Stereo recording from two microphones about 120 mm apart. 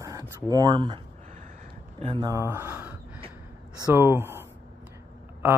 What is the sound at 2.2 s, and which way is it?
Speech, 25° right (ahead or behind).